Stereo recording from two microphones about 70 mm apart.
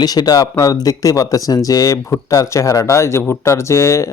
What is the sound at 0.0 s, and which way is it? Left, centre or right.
Speech, left.